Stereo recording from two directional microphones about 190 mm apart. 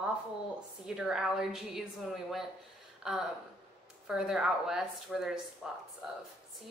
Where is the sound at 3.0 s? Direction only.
5° right (ahead or behind).